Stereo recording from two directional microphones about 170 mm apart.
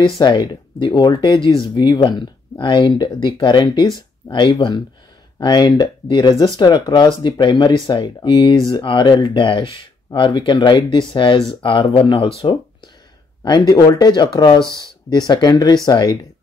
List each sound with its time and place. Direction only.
0.2 s speech: 25° left (ahead or behind)
13.4 s speech: 25° left (ahead or behind)